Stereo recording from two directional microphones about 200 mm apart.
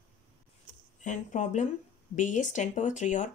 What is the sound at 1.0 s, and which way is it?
Speech, 35° left (ahead or behind).